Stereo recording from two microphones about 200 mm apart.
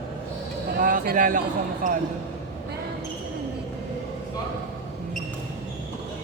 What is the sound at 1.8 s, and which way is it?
Speech, 40° right (ahead or behind).